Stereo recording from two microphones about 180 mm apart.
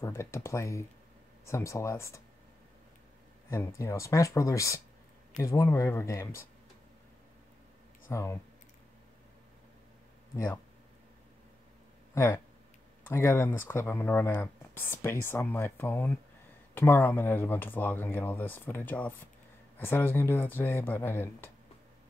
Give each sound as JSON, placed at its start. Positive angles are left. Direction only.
{"t": 0.0, "sound": "speech", "side_deg": 15}
{"t": 3.4, "sound": "speech", "side_deg": 15}
{"t": 8.1, "sound": "speech", "side_deg": 15}
{"t": 10.3, "sound": "speech", "side_deg": 15}
{"t": 12.1, "sound": "speech", "side_deg": 15}